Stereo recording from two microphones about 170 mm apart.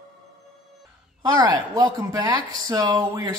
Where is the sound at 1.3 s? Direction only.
20° right (ahead or behind).